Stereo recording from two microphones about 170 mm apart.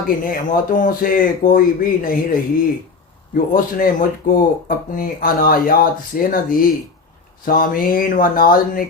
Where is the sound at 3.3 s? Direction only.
55° left (ahead or behind).